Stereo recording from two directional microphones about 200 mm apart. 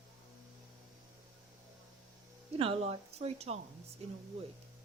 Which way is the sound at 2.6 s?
30° right (ahead or behind).